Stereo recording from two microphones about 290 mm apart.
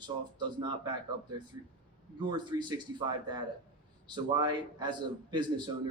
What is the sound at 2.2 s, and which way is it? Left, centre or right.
A man's voice, centre.